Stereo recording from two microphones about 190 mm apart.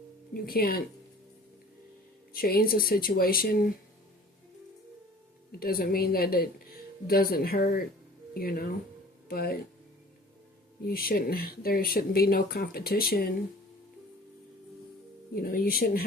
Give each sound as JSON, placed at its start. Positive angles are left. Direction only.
{"t": 0.4, "sound": "speech", "side_deg": 50}
{"t": 2.3, "sound": "speech", "side_deg": 50}
{"t": 5.5, "sound": "speech", "side_deg": 50}
{"t": 10.8, "sound": "speech", "side_deg": 50}
{"t": 15.4, "sound": "speech", "side_deg": 50}